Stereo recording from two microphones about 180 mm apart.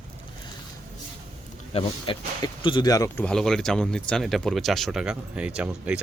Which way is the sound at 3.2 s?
5° left (ahead or behind).